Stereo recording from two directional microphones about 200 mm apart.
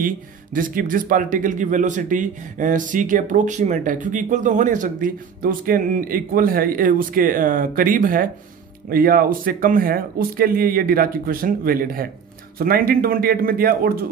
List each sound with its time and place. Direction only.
0.6 s speech: 45° right (ahead or behind)